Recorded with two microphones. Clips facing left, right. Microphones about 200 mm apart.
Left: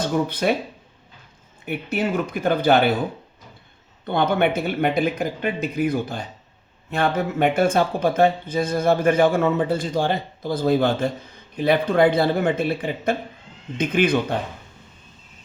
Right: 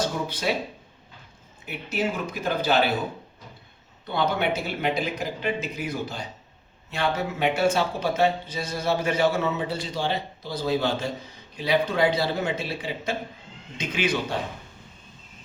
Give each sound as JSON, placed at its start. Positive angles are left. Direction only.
{"t": 0.3, "sound": "speech", "side_deg": 55}
{"t": 1.6, "sound": "speech", "side_deg": 55}
{"t": 4.0, "sound": "speech", "side_deg": 55}